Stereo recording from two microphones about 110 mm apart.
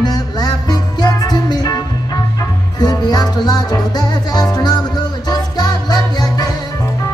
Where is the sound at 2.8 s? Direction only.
35° left (ahead or behind).